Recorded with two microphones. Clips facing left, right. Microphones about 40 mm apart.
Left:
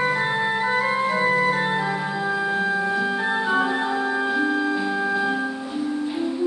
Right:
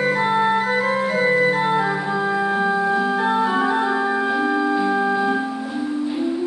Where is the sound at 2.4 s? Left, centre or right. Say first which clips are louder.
Right 3 dB; centre.